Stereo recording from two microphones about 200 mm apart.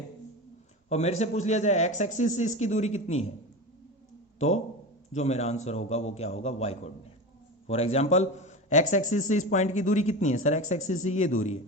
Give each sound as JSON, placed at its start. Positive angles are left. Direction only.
{"t": 0.9, "sound": "a man's voice", "side_deg": 35}
{"t": 4.4, "sound": "a man's voice", "side_deg": 35}